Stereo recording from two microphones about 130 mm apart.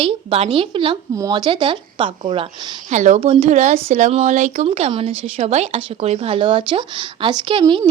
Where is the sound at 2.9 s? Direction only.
65° right (ahead or behind).